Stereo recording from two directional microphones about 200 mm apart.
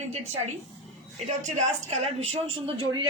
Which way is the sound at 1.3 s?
35° right (ahead or behind).